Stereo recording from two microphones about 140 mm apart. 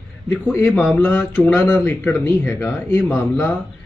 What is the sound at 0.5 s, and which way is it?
Speech, 15° left (ahead or behind).